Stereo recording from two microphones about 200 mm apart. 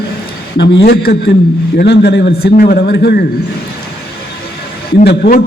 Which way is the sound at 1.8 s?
55° left (ahead or behind).